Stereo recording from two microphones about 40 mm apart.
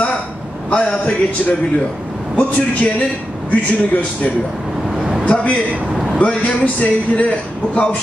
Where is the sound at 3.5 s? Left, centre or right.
Left.